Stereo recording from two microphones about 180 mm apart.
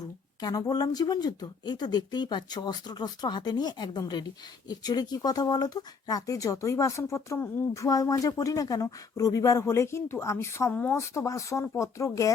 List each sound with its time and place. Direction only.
0.4 s speech: 20° left (ahead or behind)